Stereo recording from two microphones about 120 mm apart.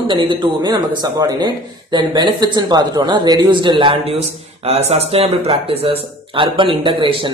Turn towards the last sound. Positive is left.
turn(degrees=-45)  # may be behind; listen again after turning